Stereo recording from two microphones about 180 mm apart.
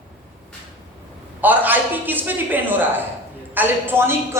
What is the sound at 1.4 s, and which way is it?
A man's voice, 10° right (ahead or behind).